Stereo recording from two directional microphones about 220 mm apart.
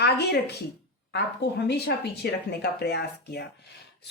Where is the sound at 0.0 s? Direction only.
50° left (ahead or behind).